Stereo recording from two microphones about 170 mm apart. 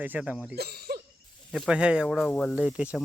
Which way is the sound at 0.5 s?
70° right (ahead or behind).